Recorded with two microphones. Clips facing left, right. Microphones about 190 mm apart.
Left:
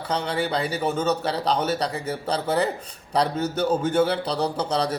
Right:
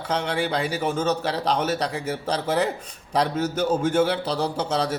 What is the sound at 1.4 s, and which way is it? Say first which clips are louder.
Speech: even; 30° left (ahead or behind).